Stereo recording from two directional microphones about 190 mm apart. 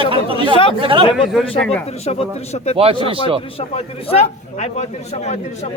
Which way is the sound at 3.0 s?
30° right (ahead or behind).